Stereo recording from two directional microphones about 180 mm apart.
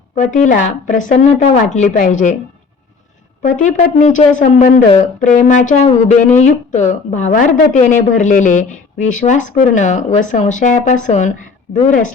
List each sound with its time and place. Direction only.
0.2 s speech: 45° left (ahead or behind)
3.4 s speech: 40° left (ahead or behind)